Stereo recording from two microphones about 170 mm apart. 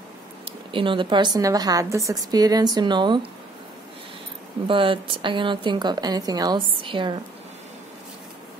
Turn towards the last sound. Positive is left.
turn(degrees=-30)  # may be behind; listen again after turning